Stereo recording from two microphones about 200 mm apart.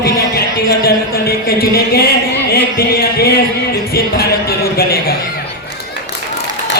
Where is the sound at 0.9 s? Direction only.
50° left (ahead or behind).